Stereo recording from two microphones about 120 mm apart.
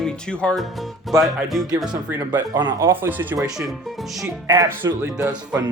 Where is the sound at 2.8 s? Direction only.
20° right (ahead or behind).